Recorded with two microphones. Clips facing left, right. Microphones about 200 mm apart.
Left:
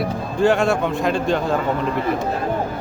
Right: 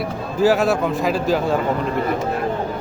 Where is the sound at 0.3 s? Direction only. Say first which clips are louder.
Right 1 dB; 5° right (ahead or behind).